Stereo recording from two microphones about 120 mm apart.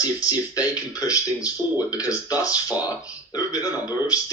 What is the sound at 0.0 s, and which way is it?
Speech, 30° left (ahead or behind).